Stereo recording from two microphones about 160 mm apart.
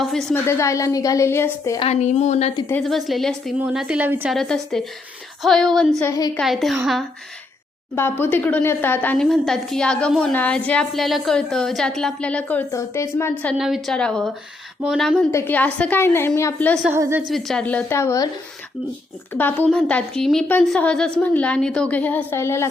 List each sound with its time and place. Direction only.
0.0 s a woman's voice: centre (ahead or behind)
0.4 s a woman's voice: 20° left (ahead or behind)
1.8 s a woman's voice: 45° left (ahead or behind)
2.8 s a woman's voice: centre (ahead or behind)
4.3 s a woman's voice: centre (ahead or behind)
6.0 s a woman's voice: 20° left (ahead or behind)
6.4 s a woman's voice: centre (ahead or behind)
7.9 s a woman's voice: 15° left (ahead or behind)
13.6 s a woman's voice: centre (ahead or behind)
15.3 s a woman's voice: 15° left (ahead or behind)
17.0 s a woman's voice: 15° right (ahead or behind)
17.2 s a woman's voice: centre (ahead or behind); by 18.3 s 20° left (ahead or behind)
19.3 s a woman's voice: 10° left (ahead or behind)